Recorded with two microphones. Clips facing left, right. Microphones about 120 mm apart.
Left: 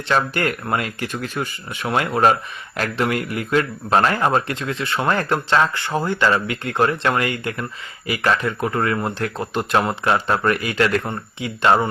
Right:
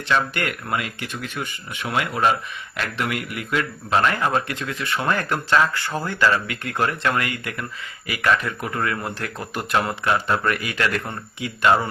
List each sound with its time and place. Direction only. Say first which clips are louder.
0.1 s speech: left 3 dB; 35° left (ahead or behind)